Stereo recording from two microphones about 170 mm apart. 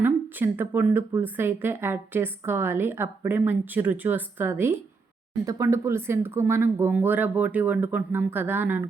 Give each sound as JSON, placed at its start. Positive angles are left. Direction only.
{"t": 0.0, "sound": "speech", "side_deg": -10}